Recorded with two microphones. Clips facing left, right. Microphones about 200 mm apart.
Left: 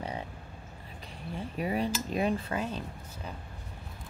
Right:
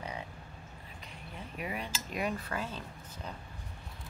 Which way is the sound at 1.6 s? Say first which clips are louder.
Left 9 dB; 35° left (ahead or behind).